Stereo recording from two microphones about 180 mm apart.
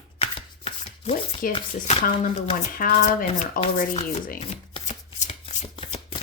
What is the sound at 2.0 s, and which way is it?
Speech, 50° left (ahead or behind).